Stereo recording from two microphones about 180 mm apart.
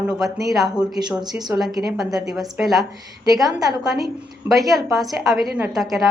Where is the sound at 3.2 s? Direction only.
20° right (ahead or behind).